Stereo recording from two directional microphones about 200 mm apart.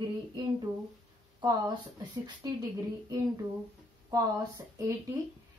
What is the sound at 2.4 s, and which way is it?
Speech, 20° right (ahead or behind).